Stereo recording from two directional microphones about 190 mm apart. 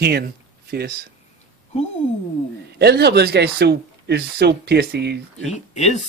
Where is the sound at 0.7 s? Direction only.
55° right (ahead or behind).